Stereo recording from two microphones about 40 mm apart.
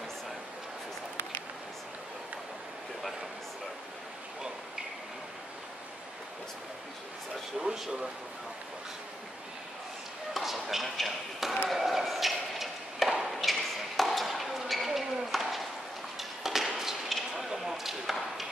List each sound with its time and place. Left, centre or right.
7.6 s speech: centre
10.3 s speech: centre
11.7 s chop: centre
13.2 s ping: centre
16.2 s a sound: centre
17.4 s arrow: centre